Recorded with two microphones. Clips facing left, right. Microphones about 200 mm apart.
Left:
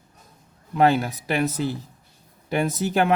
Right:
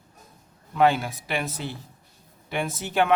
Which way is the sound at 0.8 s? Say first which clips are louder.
Left 2 dB; 40° left (ahead or behind).